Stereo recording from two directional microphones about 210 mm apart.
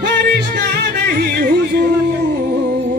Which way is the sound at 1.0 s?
45° right (ahead or behind).